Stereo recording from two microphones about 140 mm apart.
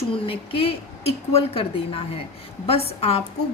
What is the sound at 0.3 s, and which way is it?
A woman's voice, 40° left (ahead or behind).